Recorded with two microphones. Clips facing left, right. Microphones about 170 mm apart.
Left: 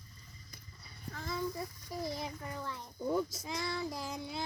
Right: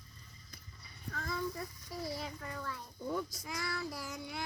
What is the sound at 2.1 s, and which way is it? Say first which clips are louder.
A child's voice: left 1 dB; 20° left (ahead or behind).